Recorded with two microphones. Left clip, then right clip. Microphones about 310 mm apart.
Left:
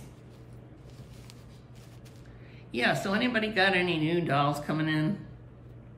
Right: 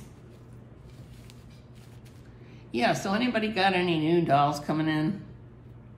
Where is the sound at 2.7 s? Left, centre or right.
Centre.